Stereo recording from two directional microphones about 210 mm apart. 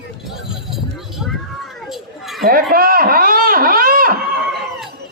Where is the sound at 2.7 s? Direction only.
45° right (ahead or behind).